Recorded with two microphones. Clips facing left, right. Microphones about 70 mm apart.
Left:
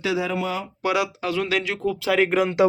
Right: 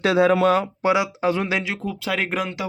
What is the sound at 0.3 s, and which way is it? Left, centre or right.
Speech, right.